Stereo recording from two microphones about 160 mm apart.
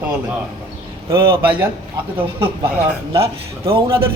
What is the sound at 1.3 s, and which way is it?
Speech, 10° right (ahead or behind).